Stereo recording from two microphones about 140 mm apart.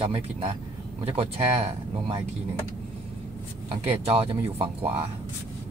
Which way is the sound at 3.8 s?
45° right (ahead or behind).